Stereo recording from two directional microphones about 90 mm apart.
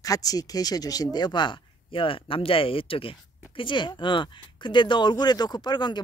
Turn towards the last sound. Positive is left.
turn(degrees=55)  # may be behind; listen again after turning